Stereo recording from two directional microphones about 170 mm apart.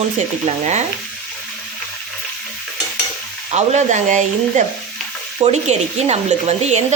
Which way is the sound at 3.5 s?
45° right (ahead or behind).